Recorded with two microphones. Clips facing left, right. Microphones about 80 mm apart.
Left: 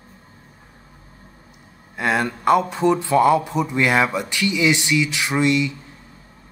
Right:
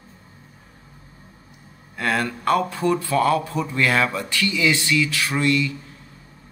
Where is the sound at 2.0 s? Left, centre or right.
Centre.